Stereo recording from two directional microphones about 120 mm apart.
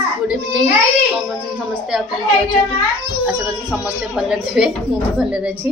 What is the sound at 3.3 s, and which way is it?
A child's voice, 5° right (ahead or behind).